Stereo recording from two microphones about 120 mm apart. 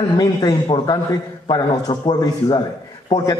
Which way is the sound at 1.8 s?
50° left (ahead or behind).